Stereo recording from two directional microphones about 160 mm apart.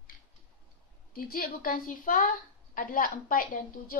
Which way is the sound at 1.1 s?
65° left (ahead or behind).